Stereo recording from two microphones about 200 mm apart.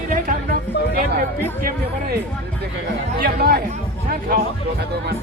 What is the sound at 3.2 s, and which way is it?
Speech, 50° right (ahead or behind).